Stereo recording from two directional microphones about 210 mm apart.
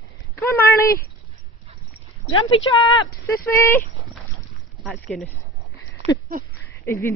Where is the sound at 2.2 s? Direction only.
20° left (ahead or behind).